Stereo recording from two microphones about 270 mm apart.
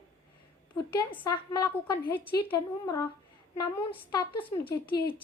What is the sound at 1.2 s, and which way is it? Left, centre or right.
A child's voice, centre.